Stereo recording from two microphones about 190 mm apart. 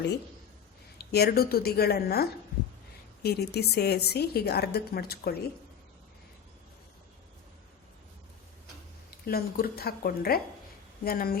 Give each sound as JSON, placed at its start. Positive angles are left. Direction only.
{"t": 1.1, "sound": "a woman's voice", "side_deg": 55}
{"t": 9.0, "sound": "speech", "side_deg": 50}